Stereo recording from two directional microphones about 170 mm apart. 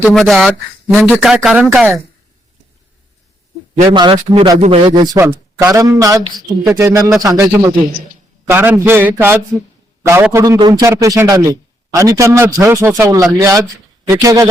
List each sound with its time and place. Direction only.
0.0 s speech: centre (ahead or behind)
3.8 s a man's voice: 25° right (ahead or behind)